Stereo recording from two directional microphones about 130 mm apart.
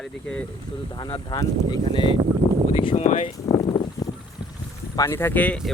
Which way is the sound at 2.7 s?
50° left (ahead or behind).